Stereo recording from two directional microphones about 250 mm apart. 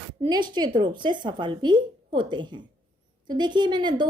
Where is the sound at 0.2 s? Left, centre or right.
Centre.